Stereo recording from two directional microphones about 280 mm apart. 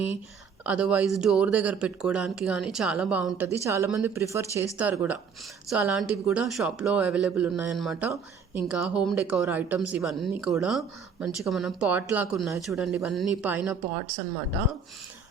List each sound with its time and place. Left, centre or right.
0.6 s speech: centre